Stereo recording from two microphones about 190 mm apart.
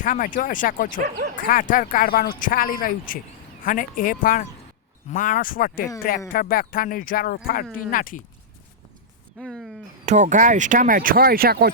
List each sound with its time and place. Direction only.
0.0 s speech: 45° left (ahead or behind)
9.4 s speech: centre (ahead or behind)
10.1 s speech: 40° right (ahead or behind)